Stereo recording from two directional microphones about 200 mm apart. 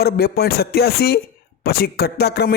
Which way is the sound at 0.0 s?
50° left (ahead or behind).